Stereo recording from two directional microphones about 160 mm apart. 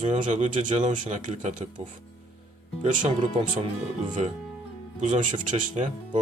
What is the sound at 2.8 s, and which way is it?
Speech, 55° right (ahead or behind).